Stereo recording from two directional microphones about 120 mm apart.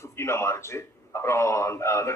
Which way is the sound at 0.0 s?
20° left (ahead or behind).